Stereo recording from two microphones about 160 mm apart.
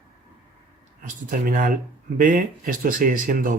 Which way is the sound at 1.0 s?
60° right (ahead or behind).